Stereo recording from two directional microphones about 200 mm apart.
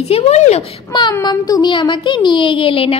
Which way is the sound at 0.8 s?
20° left (ahead or behind).